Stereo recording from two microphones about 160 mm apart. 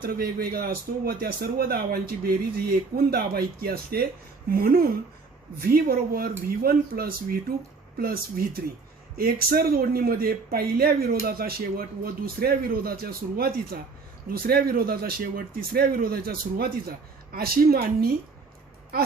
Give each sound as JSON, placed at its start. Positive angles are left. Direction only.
{"t": 0.0, "sound": "a man's voice", "side_deg": -70}